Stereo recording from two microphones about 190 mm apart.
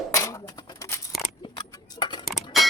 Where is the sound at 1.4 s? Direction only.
30° left (ahead or behind).